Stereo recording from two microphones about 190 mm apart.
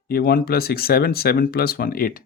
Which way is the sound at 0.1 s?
50° left (ahead or behind).